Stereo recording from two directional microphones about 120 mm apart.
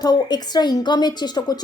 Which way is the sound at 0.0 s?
35° left (ahead or behind).